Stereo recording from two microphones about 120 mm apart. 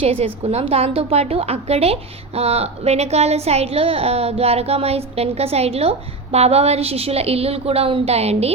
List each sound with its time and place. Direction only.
0.0 s a woman's voice: 50° right (ahead or behind)